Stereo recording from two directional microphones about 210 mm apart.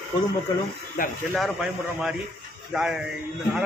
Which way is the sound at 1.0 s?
40° left (ahead or behind).